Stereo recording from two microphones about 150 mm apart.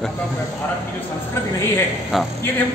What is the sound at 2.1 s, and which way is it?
Speech, centre (ahead or behind).